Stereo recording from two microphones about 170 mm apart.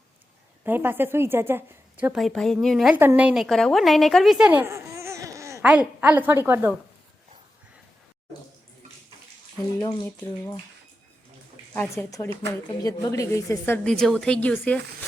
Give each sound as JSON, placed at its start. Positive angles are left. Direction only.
{"t": 0.6, "sound": "a woman's voice", "side_deg": -10}
{"t": 11.7, "sound": "a woman's voice", "side_deg": 10}
{"t": 12.6, "sound": "a woman's voice", "side_deg": 20}
{"t": 13.8, "sound": "speech", "side_deg": 5}